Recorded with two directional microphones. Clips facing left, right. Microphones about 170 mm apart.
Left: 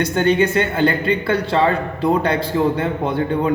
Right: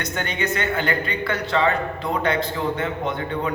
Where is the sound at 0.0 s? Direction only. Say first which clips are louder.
Left 10 dB; 30° left (ahead or behind).